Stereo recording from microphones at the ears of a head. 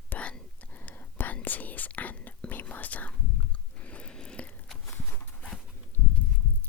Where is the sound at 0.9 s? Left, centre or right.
Left.